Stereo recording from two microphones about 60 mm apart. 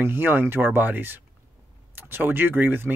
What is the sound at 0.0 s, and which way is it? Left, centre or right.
Speech, right.